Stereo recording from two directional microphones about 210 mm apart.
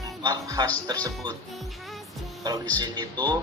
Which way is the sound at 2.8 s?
20° right (ahead or behind).